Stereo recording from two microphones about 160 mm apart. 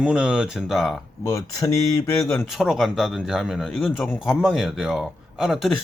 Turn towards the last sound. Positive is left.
turn(degrees=0)  # may be behind; listen again after turning